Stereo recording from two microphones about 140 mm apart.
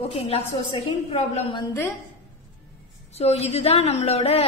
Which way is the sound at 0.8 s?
45° left (ahead or behind).